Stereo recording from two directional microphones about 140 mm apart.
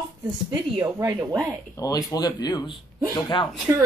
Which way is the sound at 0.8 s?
15° right (ahead or behind).